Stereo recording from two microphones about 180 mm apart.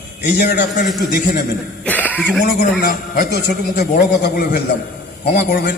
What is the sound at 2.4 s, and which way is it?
A man's voice, 55° left (ahead or behind).